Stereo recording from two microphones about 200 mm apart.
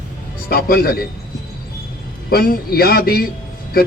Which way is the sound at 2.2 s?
50° left (ahead or behind).